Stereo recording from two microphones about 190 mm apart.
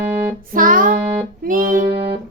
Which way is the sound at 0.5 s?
45° right (ahead or behind).